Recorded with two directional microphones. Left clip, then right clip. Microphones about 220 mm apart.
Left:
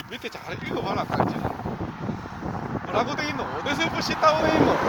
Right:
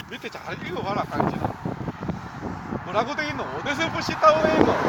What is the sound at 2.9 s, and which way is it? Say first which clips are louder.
Speech: right 1 dB; 15° right (ahead or behind).